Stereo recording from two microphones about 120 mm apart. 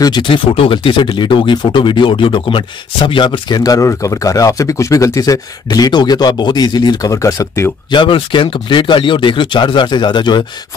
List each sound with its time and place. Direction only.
0.0 s speech: 40° left (ahead or behind)
7.9 s speech: 45° left (ahead or behind)